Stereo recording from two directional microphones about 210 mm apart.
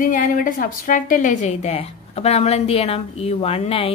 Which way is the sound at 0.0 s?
40° left (ahead or behind).